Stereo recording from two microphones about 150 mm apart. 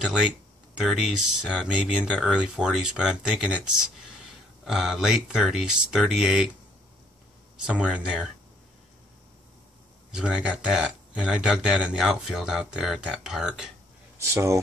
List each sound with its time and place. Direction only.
0.7 s speech: 5° right (ahead or behind)
7.6 s speech: 5° right (ahead or behind)
10.1 s speech: 5° right (ahead or behind)
14.1 s speech: 20° right (ahead or behind)